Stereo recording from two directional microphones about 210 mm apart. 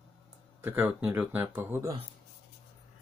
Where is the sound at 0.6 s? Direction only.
10° right (ahead or behind).